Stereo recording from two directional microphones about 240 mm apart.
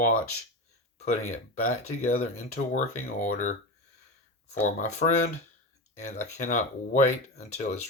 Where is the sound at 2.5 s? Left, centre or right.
Left.